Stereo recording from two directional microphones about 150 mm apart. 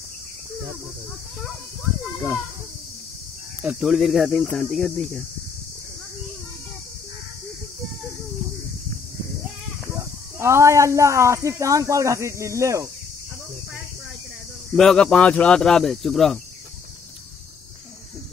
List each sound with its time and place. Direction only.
3.6 s speech: centre (ahead or behind)
9.8 s speech: 20° right (ahead or behind)
14.8 s speech: 5° left (ahead or behind)